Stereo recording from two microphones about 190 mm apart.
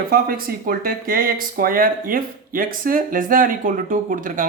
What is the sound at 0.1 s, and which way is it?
Speech, 50° right (ahead or behind).